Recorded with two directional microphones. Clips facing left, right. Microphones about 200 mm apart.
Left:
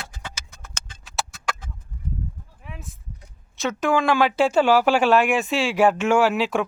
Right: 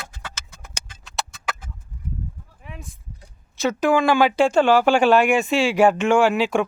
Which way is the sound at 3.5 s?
Centre (ahead or behind).